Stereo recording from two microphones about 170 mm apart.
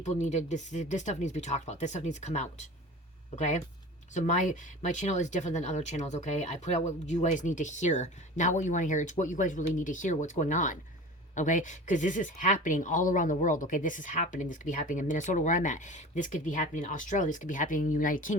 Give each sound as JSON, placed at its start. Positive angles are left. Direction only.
{"t": 0.0, "sound": "a woman's voice", "side_deg": 45}